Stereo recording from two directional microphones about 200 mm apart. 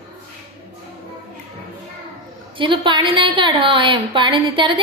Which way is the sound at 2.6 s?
25° right (ahead or behind).